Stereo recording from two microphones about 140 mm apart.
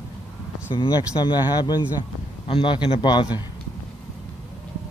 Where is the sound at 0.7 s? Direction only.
30° left (ahead or behind).